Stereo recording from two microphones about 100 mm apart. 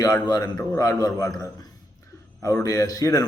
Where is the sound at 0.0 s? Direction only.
40° left (ahead or behind).